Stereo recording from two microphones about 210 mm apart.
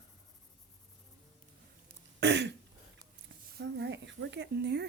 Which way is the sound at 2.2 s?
55° right (ahead or behind).